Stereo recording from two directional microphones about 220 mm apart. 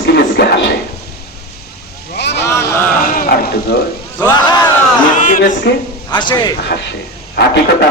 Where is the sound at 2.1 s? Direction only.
50° left (ahead or behind).